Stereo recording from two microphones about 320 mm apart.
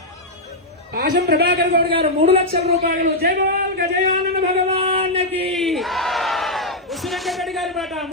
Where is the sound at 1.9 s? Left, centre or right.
Centre.